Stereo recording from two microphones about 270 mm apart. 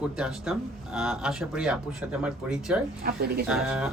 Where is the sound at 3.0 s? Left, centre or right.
Right.